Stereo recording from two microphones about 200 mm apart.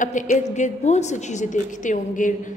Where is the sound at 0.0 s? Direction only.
40° left (ahead or behind).